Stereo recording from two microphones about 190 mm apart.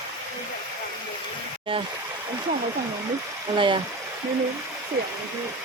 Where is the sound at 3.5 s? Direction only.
25° right (ahead or behind).